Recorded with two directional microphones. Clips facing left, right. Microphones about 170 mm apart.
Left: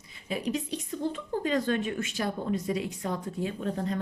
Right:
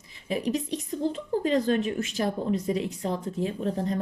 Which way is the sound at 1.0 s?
35° right (ahead or behind).